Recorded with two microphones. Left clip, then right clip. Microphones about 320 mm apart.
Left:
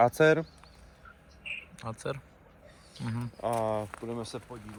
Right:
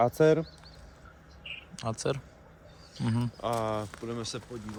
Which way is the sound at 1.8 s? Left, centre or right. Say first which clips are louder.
Right 9 dB; centre.